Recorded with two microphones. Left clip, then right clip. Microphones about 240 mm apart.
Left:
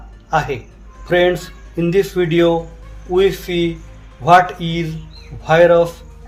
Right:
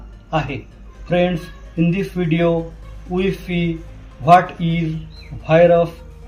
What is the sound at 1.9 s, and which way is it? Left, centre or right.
Speech, left.